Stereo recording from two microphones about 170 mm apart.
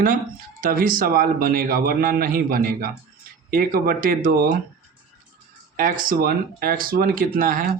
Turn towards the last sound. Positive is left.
turn(degrees=-55)  # may be behind; listen again after turning